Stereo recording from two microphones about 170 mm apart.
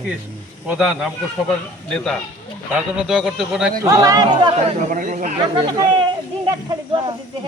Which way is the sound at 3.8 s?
20° right (ahead or behind).